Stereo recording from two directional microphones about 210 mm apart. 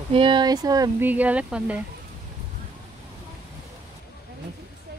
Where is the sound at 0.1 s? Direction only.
25° right (ahead or behind); by 1.8 s 5° right (ahead or behind).